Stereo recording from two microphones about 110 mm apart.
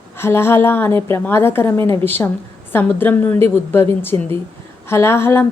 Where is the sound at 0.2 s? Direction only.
20° left (ahead or behind).